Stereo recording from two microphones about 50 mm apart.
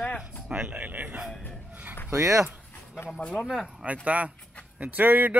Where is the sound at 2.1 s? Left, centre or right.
Right.